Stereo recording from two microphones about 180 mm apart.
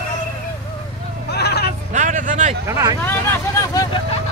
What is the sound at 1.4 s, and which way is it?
Vehicle, 65° left (ahead or behind).